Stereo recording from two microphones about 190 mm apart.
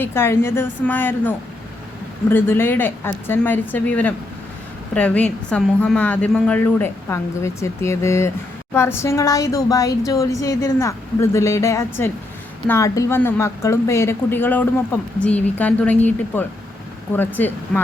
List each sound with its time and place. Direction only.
0.0 s speech: 15° left (ahead or behind)